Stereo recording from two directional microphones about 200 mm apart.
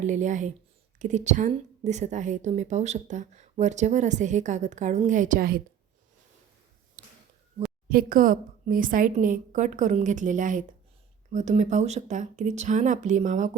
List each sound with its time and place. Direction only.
0.0 s a woman's voice: 40° right (ahead or behind)
7.0 s a sound: 40° right (ahead or behind)
7.9 s a woman's voice: 45° right (ahead or behind)